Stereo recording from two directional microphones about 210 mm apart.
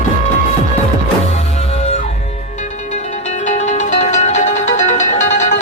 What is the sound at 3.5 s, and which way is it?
Music, 35° left (ahead or behind).